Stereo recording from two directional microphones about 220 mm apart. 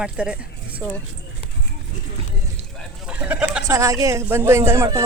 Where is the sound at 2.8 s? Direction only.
5° right (ahead or behind).